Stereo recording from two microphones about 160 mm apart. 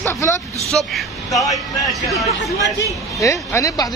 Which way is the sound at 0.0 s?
15° left (ahead or behind).